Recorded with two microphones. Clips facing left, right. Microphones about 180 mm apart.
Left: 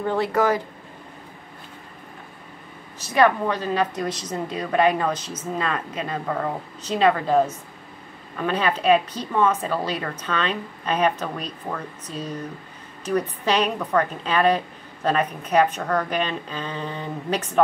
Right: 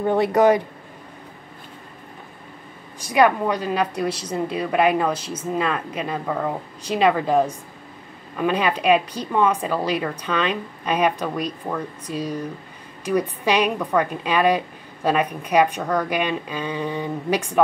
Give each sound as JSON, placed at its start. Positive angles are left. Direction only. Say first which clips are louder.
{"t": 0.0, "sound": "speech", "louder": "right 5 dB", "side_deg": -20}
{"t": 3.0, "sound": "a woman's voice", "louder": "right 1 dB", "side_deg": -10}